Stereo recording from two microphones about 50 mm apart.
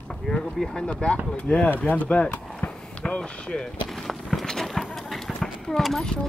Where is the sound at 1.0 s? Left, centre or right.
Left.